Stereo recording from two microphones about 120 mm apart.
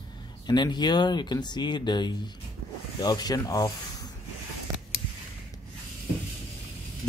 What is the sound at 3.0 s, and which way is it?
Rub, 35° left (ahead or behind).